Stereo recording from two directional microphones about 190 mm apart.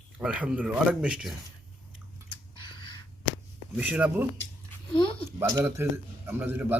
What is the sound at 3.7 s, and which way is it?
Speech, 5° right (ahead or behind).